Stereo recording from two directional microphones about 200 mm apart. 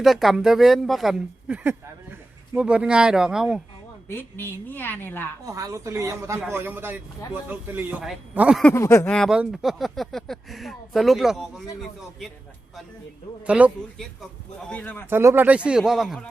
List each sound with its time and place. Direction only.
0.0 s speech: centre (ahead or behind)
4.1 s a woman's voice: 10° left (ahead or behind)
5.5 s a man's voice: 15° right (ahead or behind)
8.6 s speech: 15° left (ahead or behind)
13.5 s speech: 5° right (ahead or behind)
14.7 s a woman's voice: 10° left (ahead or behind)
15.1 s speech: 10° right (ahead or behind)